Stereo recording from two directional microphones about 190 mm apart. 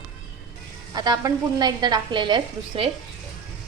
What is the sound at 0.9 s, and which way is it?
A woman's voice, 20° right (ahead or behind).